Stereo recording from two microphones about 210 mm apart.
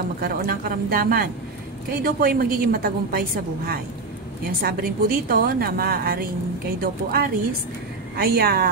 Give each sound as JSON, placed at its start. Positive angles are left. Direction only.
{"t": 0.2, "sound": "a woman's voice", "side_deg": -45}